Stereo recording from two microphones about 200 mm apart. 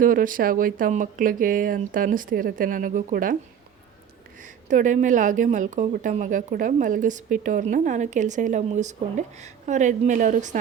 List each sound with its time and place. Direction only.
0.0 s speech: 45° right (ahead or behind)
4.4 s a woman's voice: 40° right (ahead or behind)